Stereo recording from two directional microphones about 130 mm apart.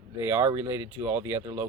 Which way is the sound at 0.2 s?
20° right (ahead or behind).